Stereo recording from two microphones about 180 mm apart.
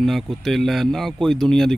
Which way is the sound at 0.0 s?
Centre (ahead or behind).